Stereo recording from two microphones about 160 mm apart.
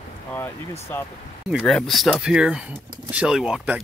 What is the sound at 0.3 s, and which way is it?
Speech, 15° left (ahead or behind).